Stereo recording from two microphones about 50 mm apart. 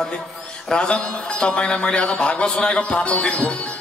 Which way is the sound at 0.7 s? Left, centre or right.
Centre.